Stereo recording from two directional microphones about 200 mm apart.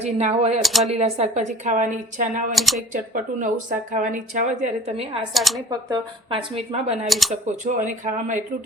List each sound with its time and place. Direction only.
0.0 s a woman's voice: 35° right (ahead or behind)
0.6 s speech: centre (ahead or behind)
0.9 s a woman's voice: 30° right (ahead or behind)
2.5 s speech: centre (ahead or behind)
3.9 s a woman's voice: 40° right (ahead or behind)
5.3 s speech: centre (ahead or behind)
5.5 s speech: 20° right (ahead or behind)
6.7 s a woman's voice: 30° right (ahead or behind)
7.1 s speech: centre (ahead or behind)
7.4 s a woman's voice: 40° right (ahead or behind)